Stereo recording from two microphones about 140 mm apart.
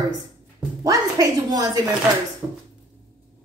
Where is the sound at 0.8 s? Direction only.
25° right (ahead or behind).